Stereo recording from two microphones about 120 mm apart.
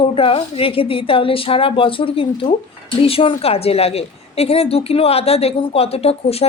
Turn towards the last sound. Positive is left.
turn(degrees=55)  # may be behind; listen again after turning